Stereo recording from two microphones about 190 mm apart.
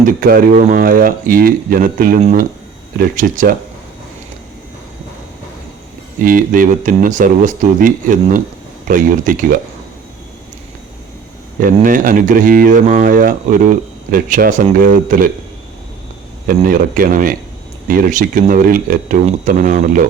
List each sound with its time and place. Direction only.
0.0 s speech: 50° right (ahead or behind)
3.2 s speech: 45° right (ahead or behind)
6.1 s speech: 45° right (ahead or behind)
11.6 s speech: 45° right (ahead or behind)
16.5 s speech: 45° right (ahead or behind)